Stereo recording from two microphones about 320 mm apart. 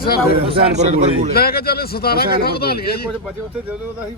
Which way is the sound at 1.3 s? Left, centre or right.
Left.